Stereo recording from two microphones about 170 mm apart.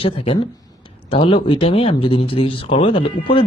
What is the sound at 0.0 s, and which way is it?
Speech, 35° left (ahead or behind).